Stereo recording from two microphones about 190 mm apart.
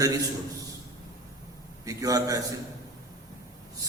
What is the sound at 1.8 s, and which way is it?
Speech, 20° right (ahead or behind).